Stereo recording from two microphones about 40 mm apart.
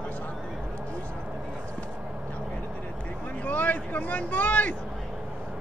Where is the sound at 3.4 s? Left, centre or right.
Left.